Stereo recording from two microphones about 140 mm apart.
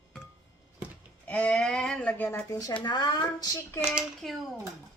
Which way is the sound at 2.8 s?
30° left (ahead or behind).